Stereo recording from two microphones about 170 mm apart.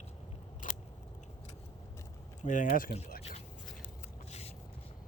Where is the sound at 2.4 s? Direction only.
50° left (ahead or behind).